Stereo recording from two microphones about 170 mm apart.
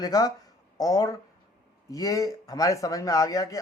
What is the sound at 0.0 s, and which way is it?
A man's voice, 20° left (ahead or behind).